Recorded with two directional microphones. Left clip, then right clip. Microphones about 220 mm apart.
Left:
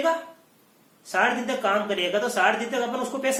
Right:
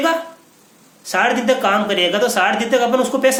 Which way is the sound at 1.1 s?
40° right (ahead or behind).